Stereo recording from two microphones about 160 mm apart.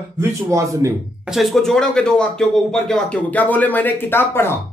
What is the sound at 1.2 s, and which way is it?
Speech, centre (ahead or behind).